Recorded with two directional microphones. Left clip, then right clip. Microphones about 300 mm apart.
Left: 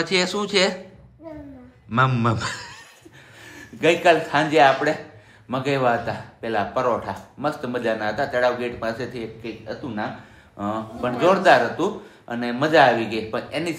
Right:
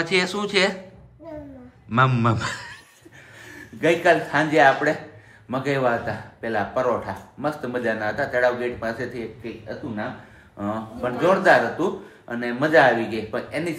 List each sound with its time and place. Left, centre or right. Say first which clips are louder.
0.0 s a man's voice: even; centre
1.9 s a man's voice: right 1 dB; centre
10.6 s a man's voice: left 1 dB; centre